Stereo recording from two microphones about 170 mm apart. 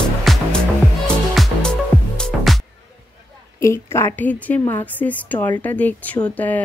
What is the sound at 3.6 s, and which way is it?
A woman's voice, 15° left (ahead or behind).